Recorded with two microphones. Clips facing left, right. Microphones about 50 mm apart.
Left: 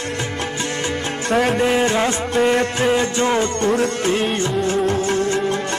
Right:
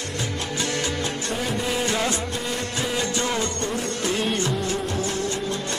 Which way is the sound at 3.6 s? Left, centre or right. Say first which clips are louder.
Left 10 dB; left.